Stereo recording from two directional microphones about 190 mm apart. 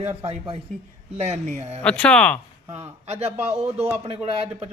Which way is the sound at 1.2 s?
35° right (ahead or behind).